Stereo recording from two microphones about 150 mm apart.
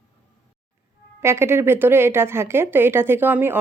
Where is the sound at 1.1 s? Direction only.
15° right (ahead or behind).